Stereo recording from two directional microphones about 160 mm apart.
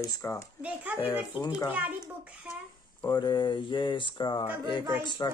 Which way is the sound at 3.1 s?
25° left (ahead or behind).